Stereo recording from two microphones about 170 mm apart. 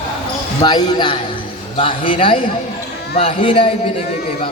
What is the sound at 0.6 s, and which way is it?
A man's voice, 25° left (ahead or behind).